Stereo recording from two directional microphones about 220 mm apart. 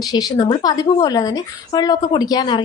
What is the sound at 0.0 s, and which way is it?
A woman's voice, 15° left (ahead or behind).